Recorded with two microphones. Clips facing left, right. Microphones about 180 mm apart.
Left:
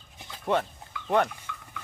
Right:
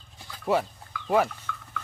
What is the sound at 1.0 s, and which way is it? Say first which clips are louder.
Speech: right 1 dB; 5° right (ahead or behind).